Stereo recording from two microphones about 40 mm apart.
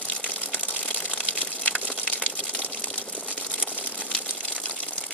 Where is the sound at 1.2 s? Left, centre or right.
Left.